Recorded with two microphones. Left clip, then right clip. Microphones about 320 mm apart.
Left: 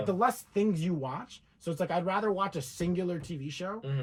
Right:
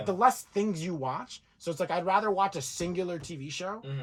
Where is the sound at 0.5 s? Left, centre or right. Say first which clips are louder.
Left 1 dB; right.